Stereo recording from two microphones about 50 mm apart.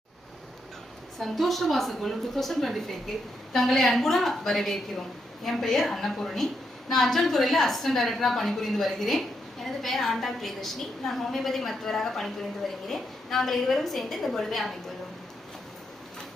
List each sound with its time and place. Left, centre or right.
1.2 s a woman's voice: centre